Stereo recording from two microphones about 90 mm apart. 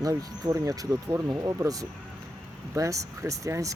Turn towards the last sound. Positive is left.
turn(degrees=-35)  # may be behind; listen again after turning